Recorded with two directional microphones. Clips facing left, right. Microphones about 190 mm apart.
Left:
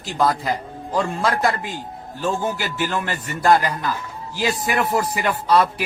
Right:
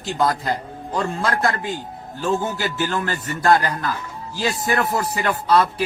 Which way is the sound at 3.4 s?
10° left (ahead or behind).